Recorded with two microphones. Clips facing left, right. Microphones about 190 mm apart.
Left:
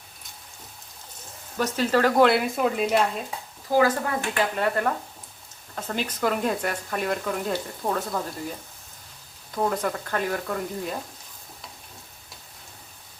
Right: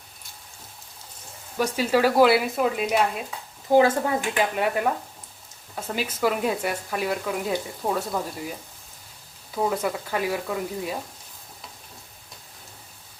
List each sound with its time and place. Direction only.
1.5 s speech: 10° right (ahead or behind)
3.7 s speech: 25° right (ahead or behind)
4.2 s speech: 10° right (ahead or behind)